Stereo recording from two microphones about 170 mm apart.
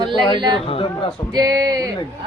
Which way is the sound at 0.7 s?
30° left (ahead or behind).